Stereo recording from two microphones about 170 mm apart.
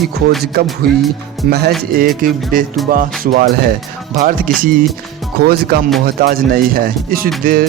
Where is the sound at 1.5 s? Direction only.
70° right (ahead or behind).